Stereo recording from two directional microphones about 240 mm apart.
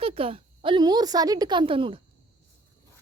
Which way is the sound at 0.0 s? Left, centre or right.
Right.